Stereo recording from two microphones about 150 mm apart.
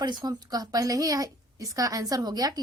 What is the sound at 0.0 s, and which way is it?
A woman's voice, 25° right (ahead or behind).